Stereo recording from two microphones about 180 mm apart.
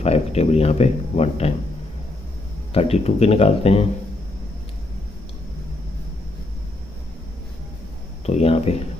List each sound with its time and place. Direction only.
0.0 s speech: 35° left (ahead or behind)
2.7 s speech: 35° left (ahead or behind)
8.3 s speech: 35° left (ahead or behind)